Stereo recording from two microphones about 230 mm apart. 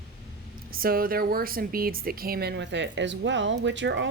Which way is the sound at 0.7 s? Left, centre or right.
Right.